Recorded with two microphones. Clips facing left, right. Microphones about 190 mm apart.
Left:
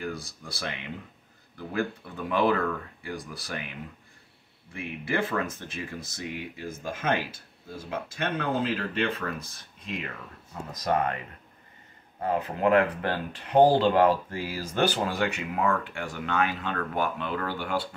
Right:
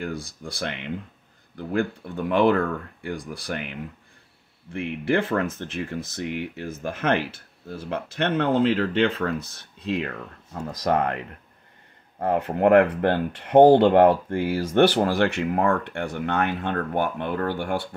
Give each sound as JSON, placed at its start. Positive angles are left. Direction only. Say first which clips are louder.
{"t": 0.0, "sound": "speech", "louder": "right 4 dB", "side_deg": -60}
{"t": 4.7, "sound": "speech", "louder": "right 6 dB", "side_deg": -60}
{"t": 9.8, "sound": "speech", "louder": "right 9 dB", "side_deg": -80}